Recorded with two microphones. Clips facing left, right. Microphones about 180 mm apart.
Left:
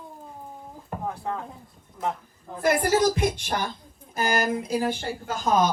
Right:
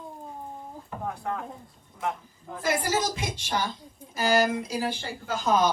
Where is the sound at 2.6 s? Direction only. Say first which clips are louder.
Left 6 dB; 60° left (ahead or behind).